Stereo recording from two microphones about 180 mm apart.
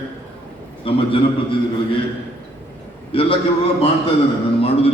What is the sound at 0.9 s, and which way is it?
Speech, 30° left (ahead or behind).